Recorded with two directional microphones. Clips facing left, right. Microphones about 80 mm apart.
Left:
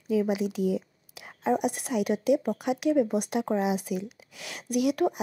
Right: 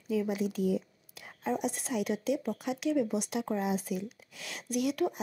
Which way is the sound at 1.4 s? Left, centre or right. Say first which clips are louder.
Left 6 dB; left.